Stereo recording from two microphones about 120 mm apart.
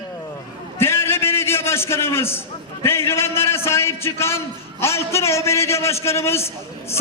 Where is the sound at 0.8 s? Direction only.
20° left (ahead or behind).